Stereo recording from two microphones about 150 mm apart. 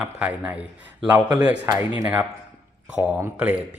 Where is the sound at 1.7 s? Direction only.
20° right (ahead or behind).